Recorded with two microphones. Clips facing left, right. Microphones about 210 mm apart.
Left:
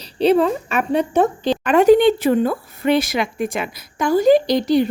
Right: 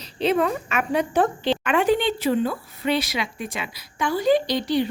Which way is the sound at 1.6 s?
40° left (ahead or behind).